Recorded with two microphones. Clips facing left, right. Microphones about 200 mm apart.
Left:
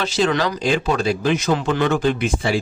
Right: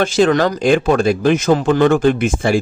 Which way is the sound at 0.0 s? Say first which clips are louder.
Right 6 dB; 50° right (ahead or behind).